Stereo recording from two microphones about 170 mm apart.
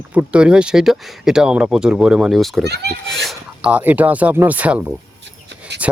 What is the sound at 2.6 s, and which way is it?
Speech, 75° right (ahead or behind).